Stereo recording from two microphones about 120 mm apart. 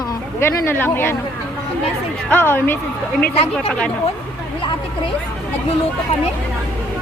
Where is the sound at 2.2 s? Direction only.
20° left (ahead or behind).